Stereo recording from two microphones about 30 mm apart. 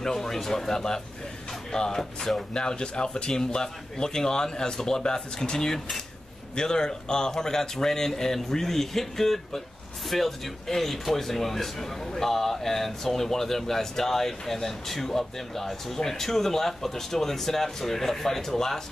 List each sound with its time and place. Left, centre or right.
0.0 s a man's voice: centre
2.5 s a man's voice: left